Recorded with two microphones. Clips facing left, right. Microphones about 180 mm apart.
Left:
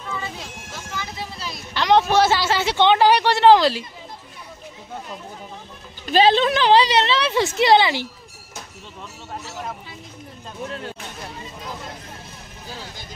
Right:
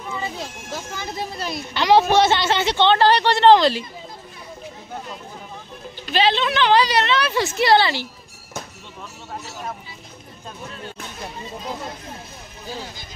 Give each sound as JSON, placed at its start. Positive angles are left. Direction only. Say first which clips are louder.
{"t": 0.9, "sound": "speech", "louder": "right 1 dB", "side_deg": -50}
{"t": 1.7, "sound": "a woman's voice", "louder": "right 1 dB", "side_deg": -5}
{"t": 6.0, "sound": "a woman's voice", "louder": "left 4 dB", "side_deg": 45}